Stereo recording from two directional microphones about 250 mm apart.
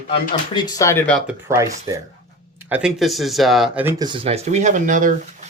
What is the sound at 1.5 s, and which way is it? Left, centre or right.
Speech, centre.